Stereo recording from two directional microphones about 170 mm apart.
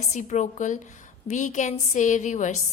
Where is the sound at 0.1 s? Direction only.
45° left (ahead or behind).